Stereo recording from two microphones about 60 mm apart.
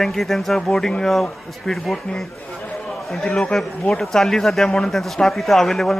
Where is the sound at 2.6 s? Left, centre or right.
Centre.